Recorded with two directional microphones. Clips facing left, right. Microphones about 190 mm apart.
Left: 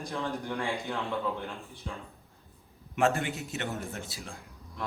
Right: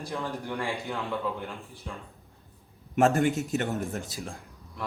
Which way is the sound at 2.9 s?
45° right (ahead or behind).